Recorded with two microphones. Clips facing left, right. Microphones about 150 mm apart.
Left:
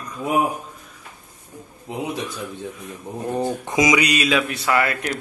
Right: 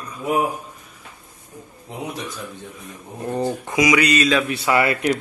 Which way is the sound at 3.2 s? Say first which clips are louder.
Right 1 dB; 10° left (ahead or behind).